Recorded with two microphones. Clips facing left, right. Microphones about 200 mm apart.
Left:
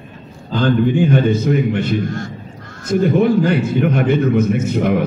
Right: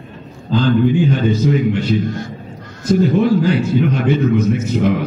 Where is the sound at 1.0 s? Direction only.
55° left (ahead or behind).